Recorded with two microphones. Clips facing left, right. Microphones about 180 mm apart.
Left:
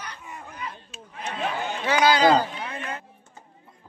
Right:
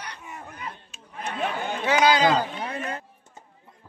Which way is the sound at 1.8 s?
20° right (ahead or behind).